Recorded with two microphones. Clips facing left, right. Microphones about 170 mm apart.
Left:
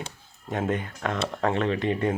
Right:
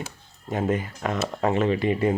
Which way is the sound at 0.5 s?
Centre (ahead or behind).